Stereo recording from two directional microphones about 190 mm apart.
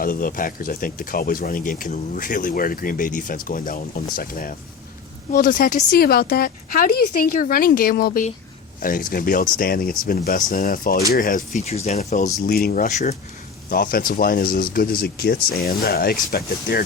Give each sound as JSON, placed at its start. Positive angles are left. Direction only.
{"t": 0.0, "sound": "speech", "side_deg": 45}
{"t": 13.7, "sound": "speech", "side_deg": 50}